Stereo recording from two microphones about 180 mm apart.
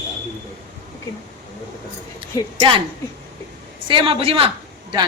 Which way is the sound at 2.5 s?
30° right (ahead or behind).